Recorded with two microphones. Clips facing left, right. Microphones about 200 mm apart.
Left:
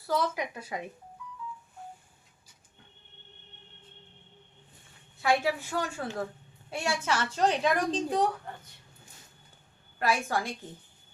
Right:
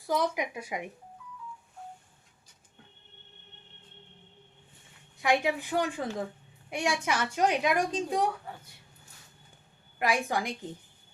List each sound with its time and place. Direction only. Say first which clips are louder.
0.0 s a woman's voice: right 1 dB; 15° right (ahead or behind)
5.1 s a woman's voice: even; 15° right (ahead or behind)
10.0 s a woman's voice: even; 15° right (ahead or behind)